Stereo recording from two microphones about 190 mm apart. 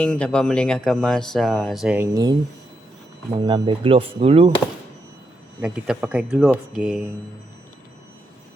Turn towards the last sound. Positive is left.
turn(degrees=-5)  # may be behind; listen again after turning